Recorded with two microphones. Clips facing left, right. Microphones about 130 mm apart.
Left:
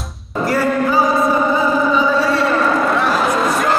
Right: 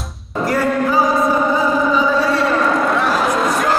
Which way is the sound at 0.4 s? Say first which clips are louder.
Even; centre (ahead or behind).